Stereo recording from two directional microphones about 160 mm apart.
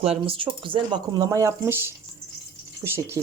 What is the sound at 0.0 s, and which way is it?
Speech, 35° right (ahead or behind).